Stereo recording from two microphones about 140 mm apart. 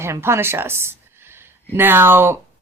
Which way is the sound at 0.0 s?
20° right (ahead or behind).